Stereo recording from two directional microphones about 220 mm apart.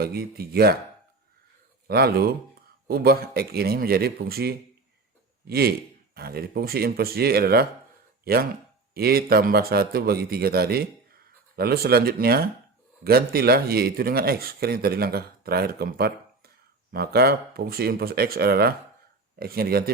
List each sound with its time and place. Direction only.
0.0 s a man's voice: 45° right (ahead or behind)
1.9 s a man's voice: 45° right (ahead or behind)